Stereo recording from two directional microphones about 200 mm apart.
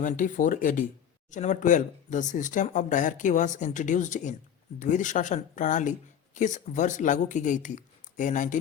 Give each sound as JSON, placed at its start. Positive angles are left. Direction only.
{"t": 0.0, "sound": "speech", "side_deg": 40}